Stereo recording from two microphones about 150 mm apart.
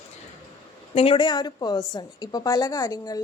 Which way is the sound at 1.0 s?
35° left (ahead or behind).